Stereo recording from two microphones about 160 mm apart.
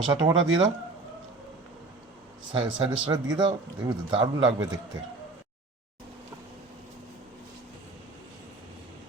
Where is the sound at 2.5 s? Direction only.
35° right (ahead or behind).